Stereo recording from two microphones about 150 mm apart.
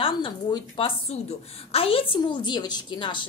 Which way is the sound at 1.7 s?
40° left (ahead or behind).